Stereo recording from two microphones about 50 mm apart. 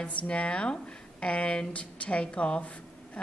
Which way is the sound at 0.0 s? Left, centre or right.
Left.